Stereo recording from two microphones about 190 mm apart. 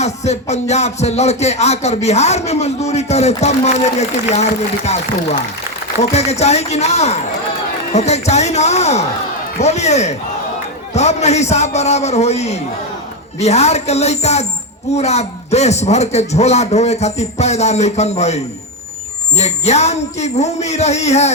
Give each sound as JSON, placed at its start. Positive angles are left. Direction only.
{"t": 0.0, "sound": "speech", "side_deg": 35}
{"t": 6.0, "sound": "speech", "side_deg": 35}